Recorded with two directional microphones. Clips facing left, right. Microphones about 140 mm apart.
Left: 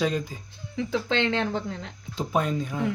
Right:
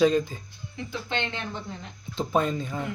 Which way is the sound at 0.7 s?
90° left.